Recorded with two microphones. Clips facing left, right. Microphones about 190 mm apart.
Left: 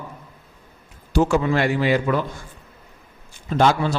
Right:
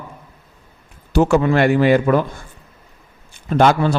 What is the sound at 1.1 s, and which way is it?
A man's voice, 65° right (ahead or behind).